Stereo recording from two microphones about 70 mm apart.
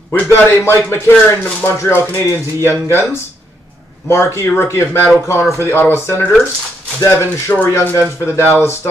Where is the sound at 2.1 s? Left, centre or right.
Left.